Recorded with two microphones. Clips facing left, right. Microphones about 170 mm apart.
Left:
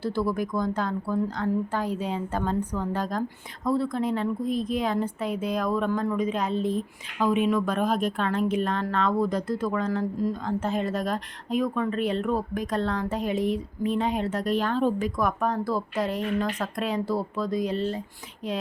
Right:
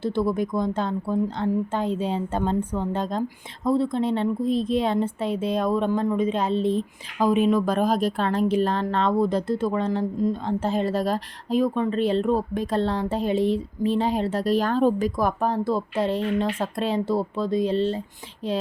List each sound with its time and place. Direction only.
0.0 s speech: 20° right (ahead or behind)